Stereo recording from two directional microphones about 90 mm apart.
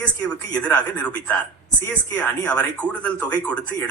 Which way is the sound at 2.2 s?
15° left (ahead or behind).